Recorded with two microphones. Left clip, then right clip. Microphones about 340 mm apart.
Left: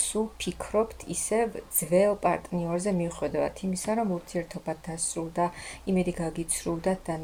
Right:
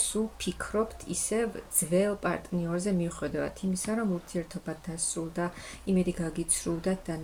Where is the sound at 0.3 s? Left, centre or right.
Centre.